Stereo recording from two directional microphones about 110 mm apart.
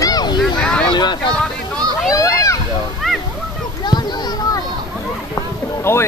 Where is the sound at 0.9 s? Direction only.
45° left (ahead or behind).